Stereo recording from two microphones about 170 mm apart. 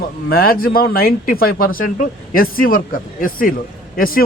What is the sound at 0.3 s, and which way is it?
A man's voice, 60° left (ahead or behind).